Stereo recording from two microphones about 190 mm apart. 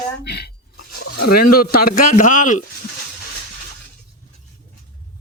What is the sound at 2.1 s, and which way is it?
Speech, 45° left (ahead or behind).